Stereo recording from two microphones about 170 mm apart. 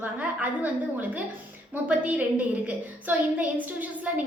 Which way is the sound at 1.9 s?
10° right (ahead or behind).